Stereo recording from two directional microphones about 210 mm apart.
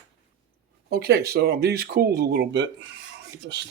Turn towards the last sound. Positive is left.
turn(degrees=-60)  # may be behind; listen again after turning